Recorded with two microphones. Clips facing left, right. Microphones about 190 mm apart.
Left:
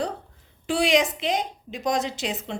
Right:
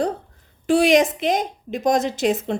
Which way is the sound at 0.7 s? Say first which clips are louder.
Right 6 dB; 45° right (ahead or behind).